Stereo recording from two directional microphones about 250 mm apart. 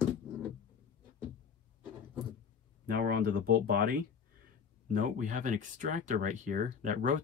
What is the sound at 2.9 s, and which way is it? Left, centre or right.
Speech, right.